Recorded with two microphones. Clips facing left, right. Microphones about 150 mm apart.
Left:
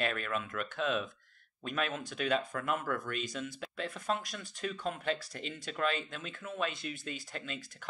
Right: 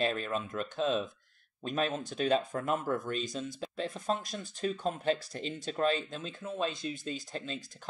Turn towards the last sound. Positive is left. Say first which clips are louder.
# right 3 dB
turn(degrees=-30)  # may be behind; listen again after turning